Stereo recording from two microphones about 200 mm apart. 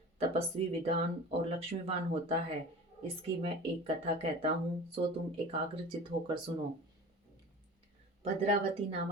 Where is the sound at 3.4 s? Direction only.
30° right (ahead or behind).